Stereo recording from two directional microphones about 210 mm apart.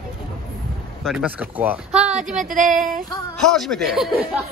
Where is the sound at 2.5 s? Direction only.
40° right (ahead or behind).